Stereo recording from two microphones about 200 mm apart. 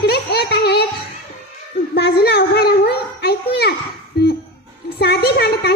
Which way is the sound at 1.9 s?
55° left (ahead or behind).